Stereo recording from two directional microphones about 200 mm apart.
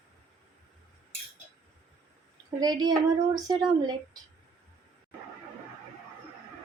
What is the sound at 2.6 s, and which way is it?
Speech, 20° right (ahead or behind).